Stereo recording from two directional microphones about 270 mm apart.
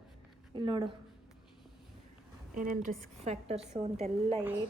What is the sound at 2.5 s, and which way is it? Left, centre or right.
A woman's voice, right.